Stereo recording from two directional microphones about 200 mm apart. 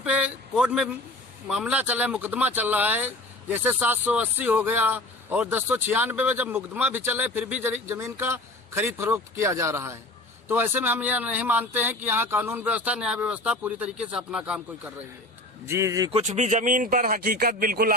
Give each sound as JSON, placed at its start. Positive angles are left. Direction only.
{"t": 0.0, "sound": "speech", "side_deg": -5}
{"t": 16.2, "sound": "speech", "side_deg": -35}